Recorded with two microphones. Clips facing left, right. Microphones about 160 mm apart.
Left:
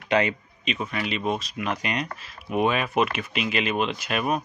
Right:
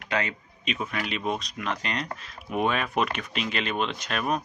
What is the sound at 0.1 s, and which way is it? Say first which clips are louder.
Speech: left 6 dB; 20° left (ahead or behind).